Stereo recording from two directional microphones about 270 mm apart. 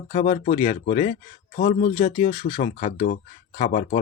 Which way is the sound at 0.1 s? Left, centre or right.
Left.